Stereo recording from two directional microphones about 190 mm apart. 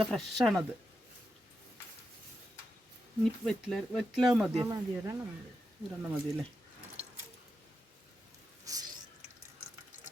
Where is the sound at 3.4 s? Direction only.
Centre (ahead or behind).